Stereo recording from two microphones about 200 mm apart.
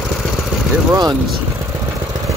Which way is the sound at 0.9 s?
20° right (ahead or behind).